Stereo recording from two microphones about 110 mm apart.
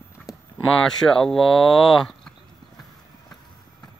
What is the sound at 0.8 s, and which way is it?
Speech, 5° left (ahead or behind).